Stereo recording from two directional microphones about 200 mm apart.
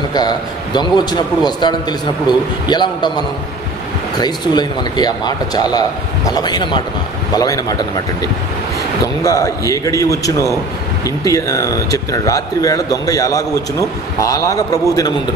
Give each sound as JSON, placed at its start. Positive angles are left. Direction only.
{"t": 0.1, "sound": "a man's voice", "side_deg": 20}
{"t": 4.2, "sound": "a man's voice", "side_deg": 20}